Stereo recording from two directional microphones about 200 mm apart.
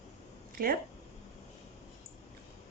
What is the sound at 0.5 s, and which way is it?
Speech, 45° right (ahead or behind).